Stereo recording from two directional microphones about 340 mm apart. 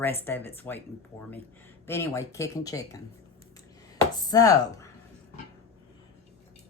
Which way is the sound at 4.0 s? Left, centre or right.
Centre.